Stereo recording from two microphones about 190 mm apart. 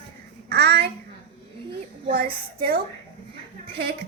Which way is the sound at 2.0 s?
50° right (ahead or behind).